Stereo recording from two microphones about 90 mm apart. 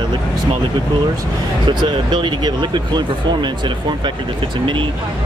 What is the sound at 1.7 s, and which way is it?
Speech, 55° right (ahead or behind).